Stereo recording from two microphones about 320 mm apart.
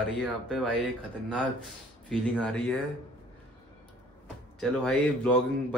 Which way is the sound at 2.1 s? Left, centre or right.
Centre.